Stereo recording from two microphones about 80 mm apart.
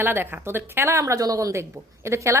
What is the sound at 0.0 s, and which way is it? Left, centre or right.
Speech, right.